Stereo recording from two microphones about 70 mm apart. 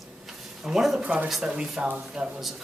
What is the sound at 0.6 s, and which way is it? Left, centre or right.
Speech, centre.